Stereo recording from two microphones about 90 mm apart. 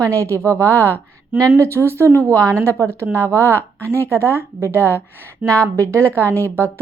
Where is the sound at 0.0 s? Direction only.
35° right (ahead or behind).